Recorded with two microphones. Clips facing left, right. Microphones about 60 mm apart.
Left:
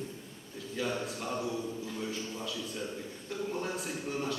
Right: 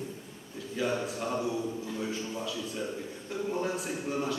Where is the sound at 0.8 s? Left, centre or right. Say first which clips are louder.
Right 4 dB; centre.